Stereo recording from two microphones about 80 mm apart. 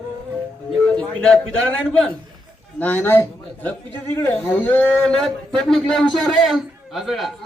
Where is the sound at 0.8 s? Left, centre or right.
Centre.